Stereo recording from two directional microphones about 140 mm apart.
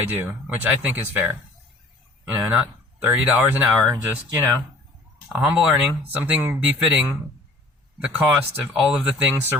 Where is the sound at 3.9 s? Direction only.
25° right (ahead or behind).